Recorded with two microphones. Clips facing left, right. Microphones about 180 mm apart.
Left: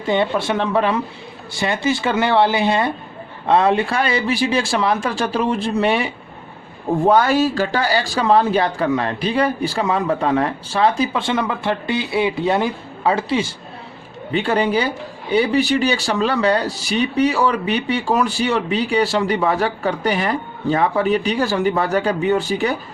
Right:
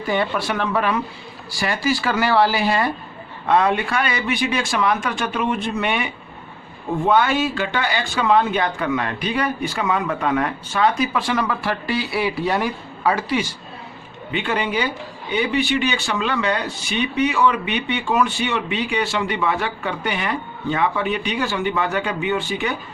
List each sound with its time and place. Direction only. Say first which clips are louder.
0.0 s speech: left 3 dB; 25° left (ahead or behind)